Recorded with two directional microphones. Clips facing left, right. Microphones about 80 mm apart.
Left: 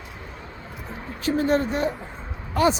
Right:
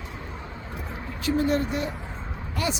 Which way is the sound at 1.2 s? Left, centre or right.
Left.